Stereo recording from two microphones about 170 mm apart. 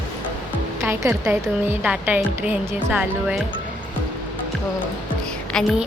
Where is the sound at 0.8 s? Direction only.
15° right (ahead or behind).